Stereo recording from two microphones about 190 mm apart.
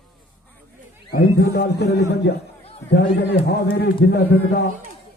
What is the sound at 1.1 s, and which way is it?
Speech, 55° left (ahead or behind).